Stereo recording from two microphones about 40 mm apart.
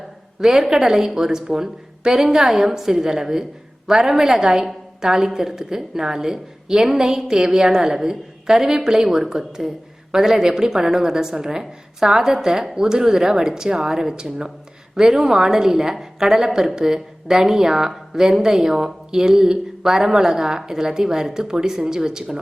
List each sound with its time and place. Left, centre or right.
0.3 s a woman's voice: centre